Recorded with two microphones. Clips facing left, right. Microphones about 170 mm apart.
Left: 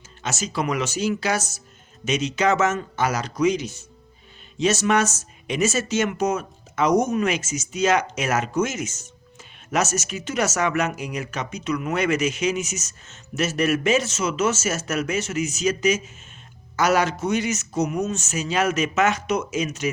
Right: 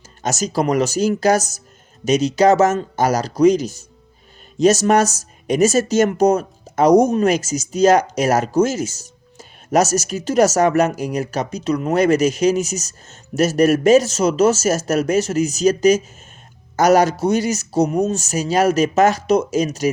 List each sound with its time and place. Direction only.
0.2 s speech: 40° right (ahead or behind)